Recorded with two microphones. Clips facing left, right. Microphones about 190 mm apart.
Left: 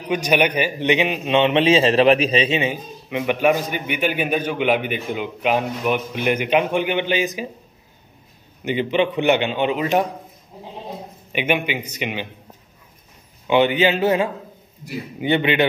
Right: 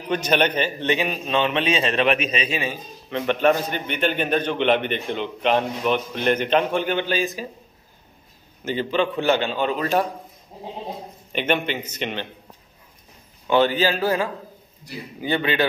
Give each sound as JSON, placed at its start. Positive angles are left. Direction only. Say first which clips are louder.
{"t": 0.1, "sound": "a man's voice", "louder": "left 2 dB", "side_deg": 10}
{"t": 8.6, "sound": "a man's voice", "louder": "left 3 dB", "side_deg": 15}
{"t": 11.3, "sound": "a man's voice", "louder": "left 1 dB", "side_deg": 10}
{"t": 13.5, "sound": "a man's voice", "louder": "left 2 dB", "side_deg": 15}